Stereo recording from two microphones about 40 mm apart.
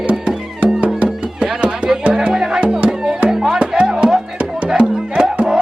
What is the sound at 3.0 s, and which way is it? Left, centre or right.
Music, right.